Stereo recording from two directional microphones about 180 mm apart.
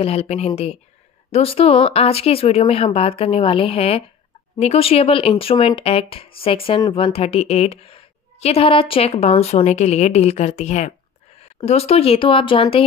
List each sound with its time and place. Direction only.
0.0 s speech: 35° left (ahead or behind)